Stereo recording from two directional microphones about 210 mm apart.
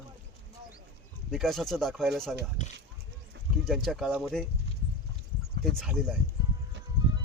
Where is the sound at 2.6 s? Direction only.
35° left (ahead or behind).